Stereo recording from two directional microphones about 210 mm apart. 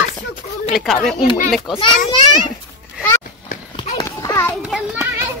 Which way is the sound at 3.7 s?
20° left (ahead or behind).